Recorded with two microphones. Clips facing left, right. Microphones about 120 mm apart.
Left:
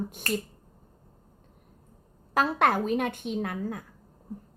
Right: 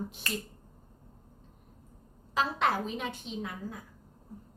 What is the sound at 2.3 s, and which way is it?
A woman's voice, 55° left (ahead or behind).